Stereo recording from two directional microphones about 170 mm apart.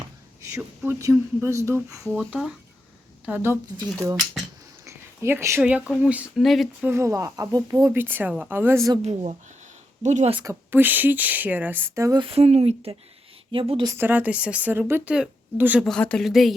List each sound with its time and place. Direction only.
0.5 s a woman's voice: 15° right (ahead or behind)
2.1 s a woman's voice: centre (ahead or behind)
4.9 s a woman's voice: 15° right (ahead or behind); by 6.7 s centre (ahead or behind)
6.8 s a woman's voice: 15° right (ahead or behind)
9.0 s speech: 40° right (ahead or behind)
10.4 s a woman's voice: 10° right (ahead or behind)
12.2 s speech: 35° right (ahead or behind)
13.9 s a woman's voice: 10° right (ahead or behind)
15.8 s a woman's voice: 5° left (ahead or behind)